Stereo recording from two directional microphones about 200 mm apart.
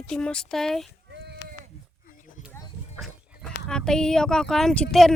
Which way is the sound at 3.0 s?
Centre (ahead or behind).